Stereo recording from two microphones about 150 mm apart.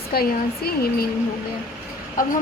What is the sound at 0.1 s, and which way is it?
Speech, 90° left.